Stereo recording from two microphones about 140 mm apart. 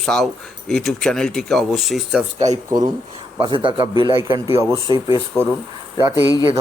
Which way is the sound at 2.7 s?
30° right (ahead or behind).